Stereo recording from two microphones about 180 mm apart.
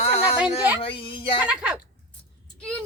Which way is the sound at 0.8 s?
30° left (ahead or behind).